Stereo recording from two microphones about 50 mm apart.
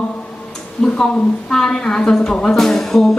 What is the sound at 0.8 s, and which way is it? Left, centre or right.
A woman's voice, centre.